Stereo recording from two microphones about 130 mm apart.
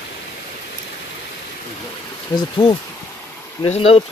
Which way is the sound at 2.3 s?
40° left (ahead or behind).